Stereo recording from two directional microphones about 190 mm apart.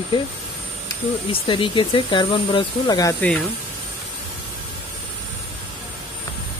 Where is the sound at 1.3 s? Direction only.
25° left (ahead or behind).